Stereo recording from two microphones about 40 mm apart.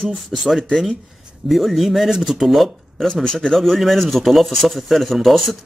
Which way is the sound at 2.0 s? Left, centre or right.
Centre.